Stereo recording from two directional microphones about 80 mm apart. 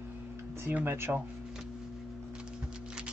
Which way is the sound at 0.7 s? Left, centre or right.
Right.